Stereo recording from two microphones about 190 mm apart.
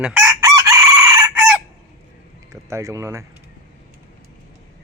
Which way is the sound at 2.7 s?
15° right (ahead or behind).